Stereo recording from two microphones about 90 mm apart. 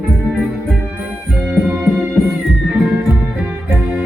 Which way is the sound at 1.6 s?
15° right (ahead or behind).